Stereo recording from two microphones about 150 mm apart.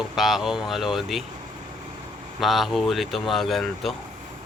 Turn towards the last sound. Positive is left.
turn(degrees=0)  # may be behind; listen again after turning